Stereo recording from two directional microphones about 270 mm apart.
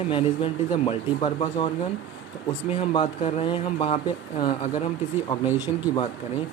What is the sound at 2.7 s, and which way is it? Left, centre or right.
Speech, left.